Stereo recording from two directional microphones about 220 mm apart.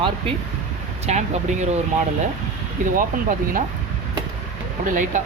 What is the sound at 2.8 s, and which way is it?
Speech, 35° right (ahead or behind).